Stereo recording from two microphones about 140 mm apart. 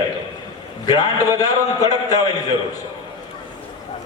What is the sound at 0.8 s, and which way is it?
A man's voice, 25° left (ahead or behind).